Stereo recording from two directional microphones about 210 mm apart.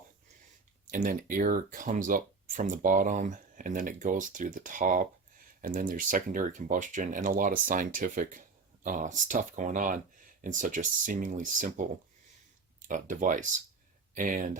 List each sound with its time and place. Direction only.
0.9 s speech: 40° right (ahead or behind)
12.9 s speech: 40° right (ahead or behind)